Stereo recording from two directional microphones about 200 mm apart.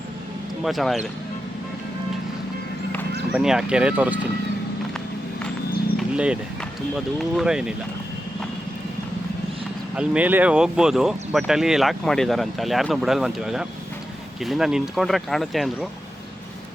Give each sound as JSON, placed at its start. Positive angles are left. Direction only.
{"t": 0.6, "sound": "speech", "side_deg": 0}
{"t": 3.3, "sound": "speech", "side_deg": -5}
{"t": 6.0, "sound": "speech", "side_deg": -5}
{"t": 9.9, "sound": "speech", "side_deg": -5}